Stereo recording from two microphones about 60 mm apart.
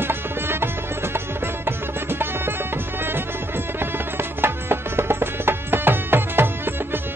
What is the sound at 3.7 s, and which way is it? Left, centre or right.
Music, right.